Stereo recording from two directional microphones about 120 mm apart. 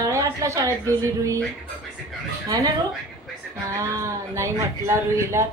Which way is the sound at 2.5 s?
35° right (ahead or behind).